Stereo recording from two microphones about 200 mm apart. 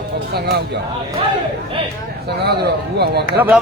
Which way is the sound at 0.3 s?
50° right (ahead or behind).